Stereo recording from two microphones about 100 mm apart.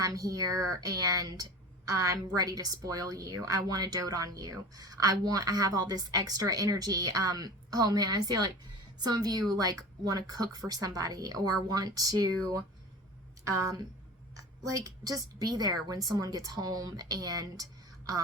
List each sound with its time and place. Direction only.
0.0 s a woman's voice: 35° right (ahead or behind)